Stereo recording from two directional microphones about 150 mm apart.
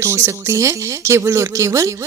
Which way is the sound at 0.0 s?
15° right (ahead or behind).